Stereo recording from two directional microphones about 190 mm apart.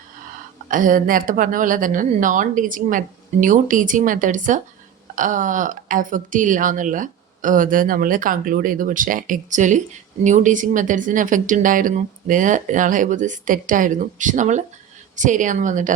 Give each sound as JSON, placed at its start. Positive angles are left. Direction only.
{"t": 0.7, "sound": "speech", "side_deg": -45}